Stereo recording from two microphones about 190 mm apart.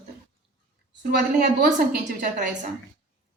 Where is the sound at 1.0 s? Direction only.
50° right (ahead or behind).